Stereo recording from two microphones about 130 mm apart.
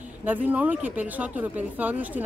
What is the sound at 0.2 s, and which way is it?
Speech, 15° right (ahead or behind).